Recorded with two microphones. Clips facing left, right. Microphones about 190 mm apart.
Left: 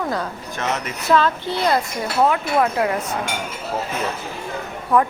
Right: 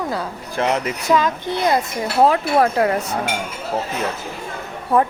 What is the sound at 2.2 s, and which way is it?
Speech, 35° right (ahead or behind).